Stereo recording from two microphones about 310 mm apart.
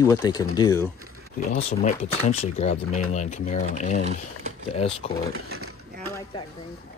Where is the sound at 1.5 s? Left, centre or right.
Left.